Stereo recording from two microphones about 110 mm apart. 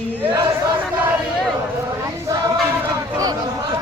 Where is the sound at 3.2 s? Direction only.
35° right (ahead or behind).